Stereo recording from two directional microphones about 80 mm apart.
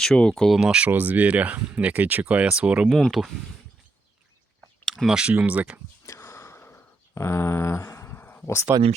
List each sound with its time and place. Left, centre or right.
0.0 s speech: centre
0.5 s speech: centre
0.9 s speech: right
2.9 s speech: centre
4.9 s a sound: centre
5.1 s speech: centre
6.1 s a sound: left